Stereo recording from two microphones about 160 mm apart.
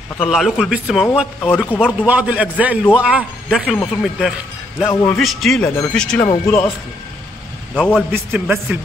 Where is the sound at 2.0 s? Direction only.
10° right (ahead or behind).